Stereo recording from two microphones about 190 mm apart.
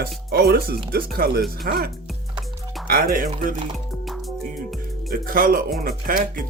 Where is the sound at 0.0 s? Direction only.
55° right (ahead or behind).